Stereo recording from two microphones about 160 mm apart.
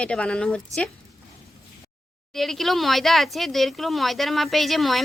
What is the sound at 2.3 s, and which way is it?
Speech, centre (ahead or behind).